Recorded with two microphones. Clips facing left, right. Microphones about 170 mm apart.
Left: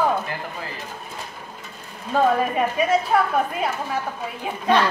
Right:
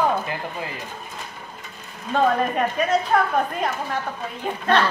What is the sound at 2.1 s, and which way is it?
A woman's voice, 5° left (ahead or behind).